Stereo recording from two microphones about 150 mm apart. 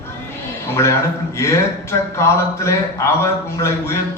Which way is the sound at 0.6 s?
20° left (ahead or behind).